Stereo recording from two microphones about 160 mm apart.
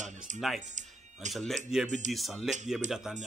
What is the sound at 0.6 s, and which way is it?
Speech, 50° right (ahead or behind).